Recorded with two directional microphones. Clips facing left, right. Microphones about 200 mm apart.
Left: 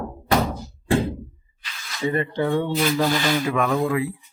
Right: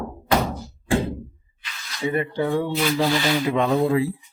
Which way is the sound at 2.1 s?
10° right (ahead or behind).